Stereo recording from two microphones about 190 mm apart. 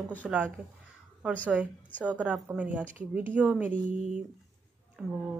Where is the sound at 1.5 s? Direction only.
5° right (ahead or behind).